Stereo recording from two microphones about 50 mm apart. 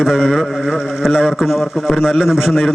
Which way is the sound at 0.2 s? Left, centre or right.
Centre.